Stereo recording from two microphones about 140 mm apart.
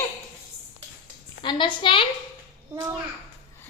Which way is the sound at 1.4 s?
35° left (ahead or behind).